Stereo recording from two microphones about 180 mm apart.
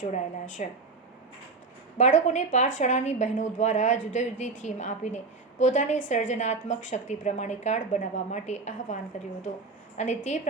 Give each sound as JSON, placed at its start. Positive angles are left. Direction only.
{"t": 0.0, "sound": "speech", "side_deg": 45}
{"t": 2.0, "sound": "a woman's voice", "side_deg": 40}
{"t": 10.0, "sound": "a woman's voice", "side_deg": 40}